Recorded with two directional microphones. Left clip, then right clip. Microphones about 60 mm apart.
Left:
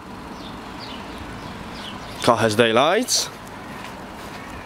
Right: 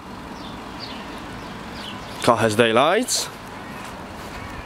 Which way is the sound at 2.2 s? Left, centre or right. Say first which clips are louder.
Even; centre.